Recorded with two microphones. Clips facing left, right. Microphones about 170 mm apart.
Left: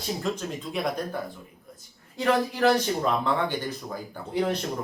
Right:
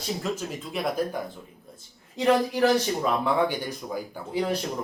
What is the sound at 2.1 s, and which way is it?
Speech, 20° right (ahead or behind).